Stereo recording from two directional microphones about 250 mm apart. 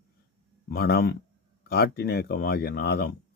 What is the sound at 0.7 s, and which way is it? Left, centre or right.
Speech, left.